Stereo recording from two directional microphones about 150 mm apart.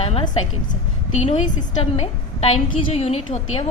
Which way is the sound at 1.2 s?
50° left (ahead or behind).